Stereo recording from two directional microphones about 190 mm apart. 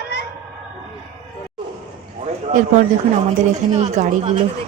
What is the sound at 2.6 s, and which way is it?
Speech, 40° right (ahead or behind).